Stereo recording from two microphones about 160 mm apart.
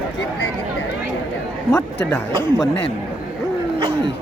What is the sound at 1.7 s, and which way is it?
Speech, 15° left (ahead or behind).